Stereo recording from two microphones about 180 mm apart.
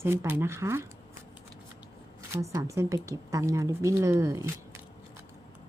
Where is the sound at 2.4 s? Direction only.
15° right (ahead or behind).